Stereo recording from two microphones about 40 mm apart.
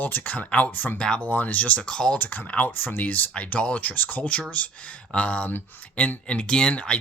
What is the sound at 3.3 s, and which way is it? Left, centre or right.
Speech, left.